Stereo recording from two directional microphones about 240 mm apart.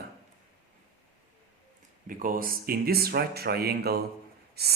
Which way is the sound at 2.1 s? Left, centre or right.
Right.